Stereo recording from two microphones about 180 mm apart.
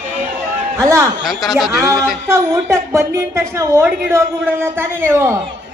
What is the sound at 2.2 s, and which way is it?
A woman's voice, 15° right (ahead or behind).